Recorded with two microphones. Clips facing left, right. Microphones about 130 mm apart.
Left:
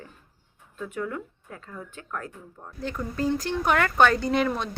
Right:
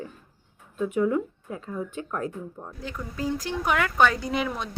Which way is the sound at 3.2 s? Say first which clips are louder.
Left 2 dB; 10° right (ahead or behind).